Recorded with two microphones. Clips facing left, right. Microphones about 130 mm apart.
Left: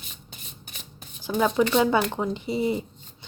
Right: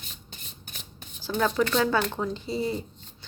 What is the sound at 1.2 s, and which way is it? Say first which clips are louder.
Speech: left 3 dB; 15° left (ahead or behind).